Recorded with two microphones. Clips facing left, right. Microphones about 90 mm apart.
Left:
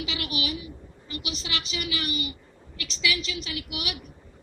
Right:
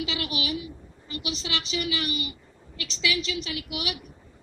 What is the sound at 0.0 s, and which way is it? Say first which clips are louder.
A woman's voice: right 1 dB; 25° right (ahead or behind).